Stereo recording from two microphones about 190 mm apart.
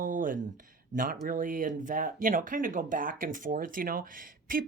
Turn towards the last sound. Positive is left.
turn(degrees=-45)  # may be behind; listen again after turning